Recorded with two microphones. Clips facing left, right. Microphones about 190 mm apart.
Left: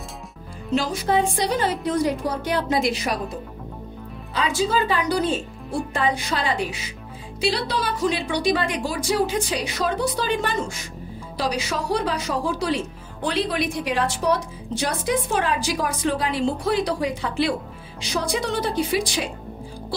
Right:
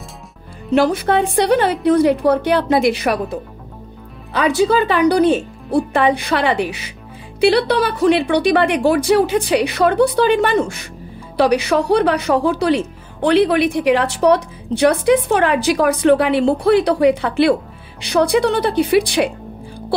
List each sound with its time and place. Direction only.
0.7 s a woman's voice: 65° right (ahead or behind)